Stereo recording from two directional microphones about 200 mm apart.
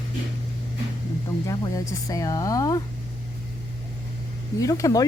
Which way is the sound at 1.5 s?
15° left (ahead or behind).